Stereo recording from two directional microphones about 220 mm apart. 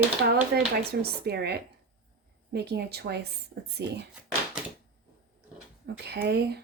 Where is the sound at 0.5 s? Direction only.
50° right (ahead or behind).